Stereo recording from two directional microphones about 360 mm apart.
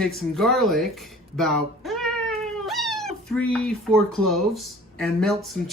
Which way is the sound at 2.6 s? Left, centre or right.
Centre.